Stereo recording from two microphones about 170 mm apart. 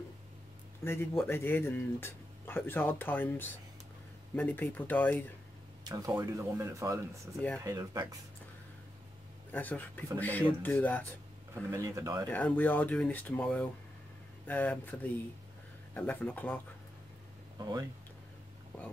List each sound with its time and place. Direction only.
0.8 s speech: 15° left (ahead or behind)
5.9 s speech: 20° right (ahead or behind)
9.5 s speech: 10° left (ahead or behind)
11.7 s speech: 20° right (ahead or behind)
12.3 s speech: 10° left (ahead or behind)
17.6 s speech: 20° right (ahead or behind)